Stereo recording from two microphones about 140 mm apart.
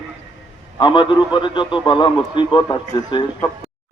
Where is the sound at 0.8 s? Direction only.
35° left (ahead or behind).